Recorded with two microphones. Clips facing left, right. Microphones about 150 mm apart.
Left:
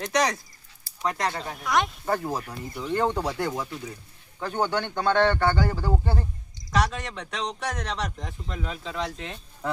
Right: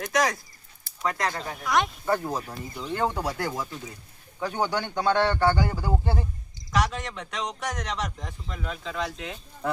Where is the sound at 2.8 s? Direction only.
5° right (ahead or behind).